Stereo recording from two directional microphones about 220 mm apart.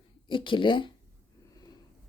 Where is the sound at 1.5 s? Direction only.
15° left (ahead or behind).